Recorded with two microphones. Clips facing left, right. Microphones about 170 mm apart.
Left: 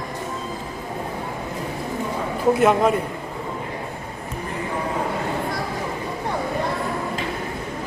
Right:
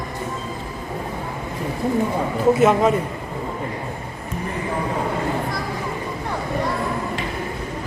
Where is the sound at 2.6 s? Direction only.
Centre (ahead or behind).